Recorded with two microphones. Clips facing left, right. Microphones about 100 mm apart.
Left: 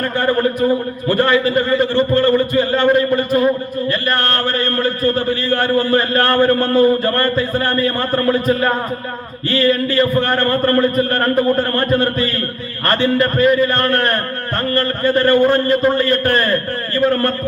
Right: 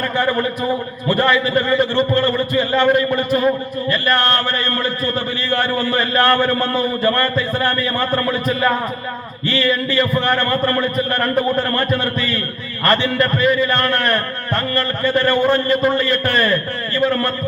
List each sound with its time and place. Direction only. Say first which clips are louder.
0.2 s a man's voice: left 4 dB; 45° left (ahead or behind)
3.8 s mantra: right 2 dB; 40° left (ahead or behind)
4.8 s a man's voice: left 4 dB; 45° left (ahead or behind)